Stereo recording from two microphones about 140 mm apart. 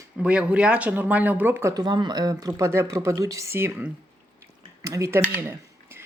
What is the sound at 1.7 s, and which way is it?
Speech, 30° right (ahead or behind).